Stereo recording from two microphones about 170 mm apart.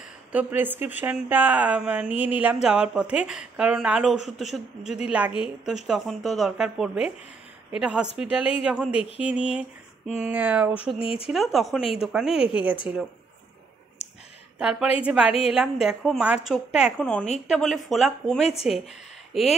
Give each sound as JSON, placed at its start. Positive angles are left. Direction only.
{"t": 0.3, "sound": "a woman's voice", "side_deg": -10}
{"t": 11.0, "sound": "speech", "side_deg": 35}
{"t": 11.2, "sound": "a woman's voice", "side_deg": 0}
{"t": 14.0, "sound": "a sound", "side_deg": 40}
{"t": 14.6, "sound": "a woman's voice", "side_deg": -5}
{"t": 18.4, "sound": "speech", "side_deg": 35}